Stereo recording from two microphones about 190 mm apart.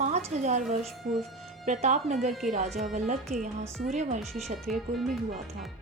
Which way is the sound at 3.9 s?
40° right (ahead or behind).